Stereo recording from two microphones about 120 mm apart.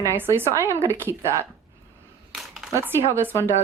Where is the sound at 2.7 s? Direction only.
20° right (ahead or behind).